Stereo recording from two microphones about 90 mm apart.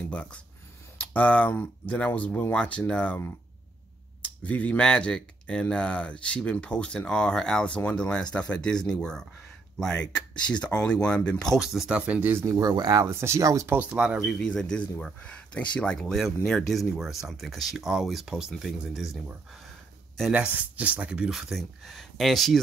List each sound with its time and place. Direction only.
0.1 s speech: 15° left (ahead or behind)
4.2 s speech: 15° left (ahead or behind)
11.6 s speech: 5° right (ahead or behind)
12.2 s speech: 25° right (ahead or behind)
12.4 s speech: 45° right (ahead or behind)
13.0 s speech: 30° right (ahead or behind)
13.7 s speech: 15° right (ahead or behind)
14.2 s speech: 5° left (ahead or behind)
20.3 s speech: 15° right (ahead or behind)
21.3 s speech: centre (ahead or behind)